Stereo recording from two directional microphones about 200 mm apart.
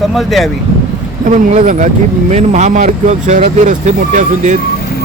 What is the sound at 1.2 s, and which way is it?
Speech, 40° right (ahead or behind).